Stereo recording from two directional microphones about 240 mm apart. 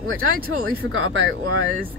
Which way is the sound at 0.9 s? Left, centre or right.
Right.